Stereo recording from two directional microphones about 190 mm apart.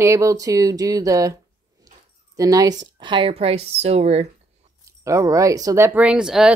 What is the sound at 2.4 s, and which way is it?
Speech, 20° right (ahead or behind).